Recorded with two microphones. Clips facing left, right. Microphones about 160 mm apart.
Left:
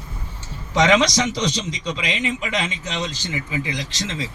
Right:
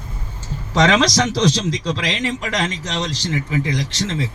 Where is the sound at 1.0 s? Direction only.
90° right.